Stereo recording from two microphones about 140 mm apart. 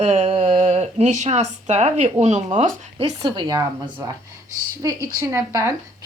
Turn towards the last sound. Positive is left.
turn(degrees=-25)  # may be behind; listen again after turning